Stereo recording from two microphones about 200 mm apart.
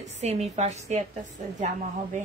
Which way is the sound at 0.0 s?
35° right (ahead or behind).